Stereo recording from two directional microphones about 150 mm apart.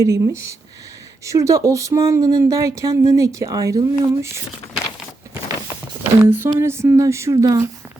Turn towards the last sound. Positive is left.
turn(degrees=-20)  # may be behind; listen again after turning